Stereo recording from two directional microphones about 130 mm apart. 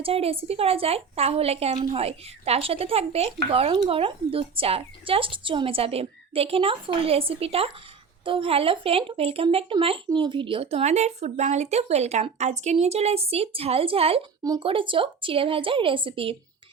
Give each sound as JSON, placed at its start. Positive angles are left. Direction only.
{"t": 0.0, "sound": "speech", "side_deg": -50}